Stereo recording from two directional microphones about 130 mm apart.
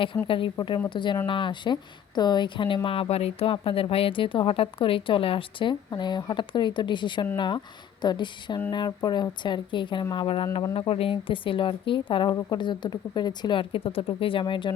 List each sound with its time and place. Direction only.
0.3 s speech: 40° left (ahead or behind)